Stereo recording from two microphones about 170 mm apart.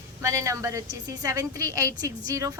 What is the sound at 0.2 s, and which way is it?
A woman's voice, 15° right (ahead or behind).